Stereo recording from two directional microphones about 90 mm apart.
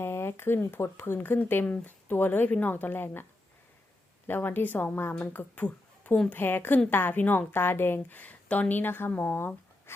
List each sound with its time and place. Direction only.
0.0 s a woman's voice: 30° left (ahead or behind)
4.3 s a woman's voice: 20° left (ahead or behind)
6.3 s a woman's voice: 20° left (ahead or behind)